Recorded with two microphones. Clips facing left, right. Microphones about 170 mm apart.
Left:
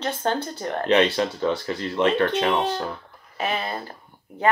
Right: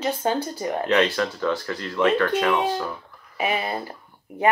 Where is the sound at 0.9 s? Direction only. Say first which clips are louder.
Left 3 dB; 20° left (ahead or behind).